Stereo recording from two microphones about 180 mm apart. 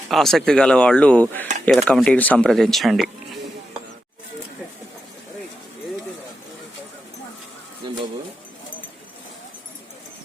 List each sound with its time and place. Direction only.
0.1 s speech: centre (ahead or behind)
7.8 s music: 25° right (ahead or behind)